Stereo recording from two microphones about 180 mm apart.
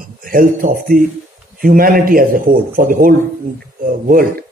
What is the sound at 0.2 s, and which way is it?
Speech, 50° right (ahead or behind).